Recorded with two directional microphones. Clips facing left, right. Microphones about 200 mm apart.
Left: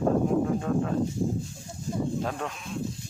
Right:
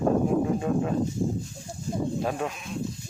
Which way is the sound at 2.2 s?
10° right (ahead or behind).